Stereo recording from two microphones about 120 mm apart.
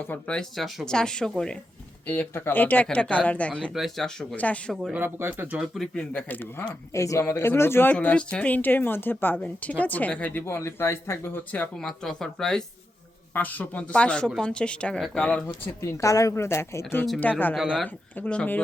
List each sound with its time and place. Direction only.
0.0 s speech: 10° left (ahead or behind)
2.0 s speech: 15° left (ahead or behind)
4.9 s speech: 15° right (ahead or behind)
5.5 s speech: centre (ahead or behind)
6.9 s speech: 25° left (ahead or behind)
11.9 s speech: 5° left (ahead or behind)
15.8 s a woman's voice: 25° left (ahead or behind)
17.5 s speech: centre (ahead or behind)
17.8 s speech: 10° left (ahead or behind)